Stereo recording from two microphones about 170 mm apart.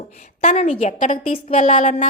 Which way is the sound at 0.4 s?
40° left (ahead or behind).